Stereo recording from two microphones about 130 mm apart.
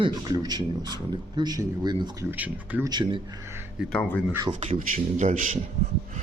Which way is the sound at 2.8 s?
35° right (ahead or behind).